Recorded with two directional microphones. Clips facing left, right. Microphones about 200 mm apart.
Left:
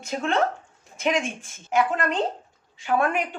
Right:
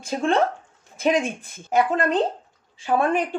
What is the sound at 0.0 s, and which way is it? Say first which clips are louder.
Speech: right 4 dB; 30° right (ahead or behind).